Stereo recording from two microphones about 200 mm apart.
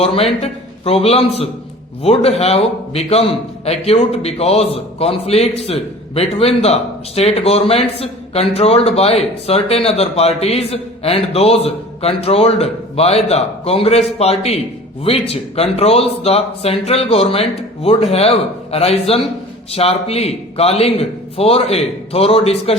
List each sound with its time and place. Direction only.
0.0 s speech: 30° left (ahead or behind)